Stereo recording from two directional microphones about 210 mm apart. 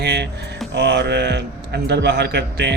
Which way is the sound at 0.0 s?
50° right (ahead or behind).